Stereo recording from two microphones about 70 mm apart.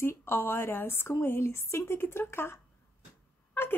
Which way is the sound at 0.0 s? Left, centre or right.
Left.